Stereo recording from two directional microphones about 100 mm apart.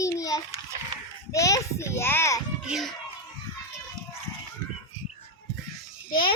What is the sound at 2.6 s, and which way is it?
Speech, 5° right (ahead or behind).